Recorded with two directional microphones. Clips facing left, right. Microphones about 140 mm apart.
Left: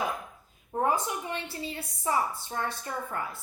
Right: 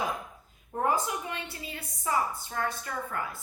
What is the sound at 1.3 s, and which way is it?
A woman's voice, 30° left (ahead or behind).